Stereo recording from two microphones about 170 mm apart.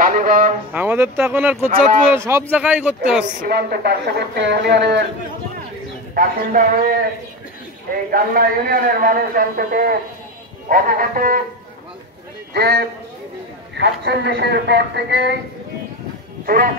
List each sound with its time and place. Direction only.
0.0 s a sound: 55° right (ahead or behind)
0.7 s speech: 10° right (ahead or behind)
1.7 s speech: 55° right (ahead or behind)
2.1 s speech: 15° right (ahead or behind)
3.4 s speech: 65° right (ahead or behind); by 5.0 s 85° right
6.1 s a man's voice: 55° right (ahead or behind)
8.1 s a man's voice: 60° right (ahead or behind)
12.5 s a man's voice: 70° right (ahead or behind)
13.7 s speech: 80° right
16.4 s music: 60° right (ahead or behind)